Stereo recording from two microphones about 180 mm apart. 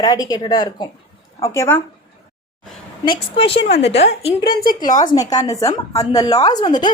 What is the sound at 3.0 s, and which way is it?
A woman's voice, 30° left (ahead or behind).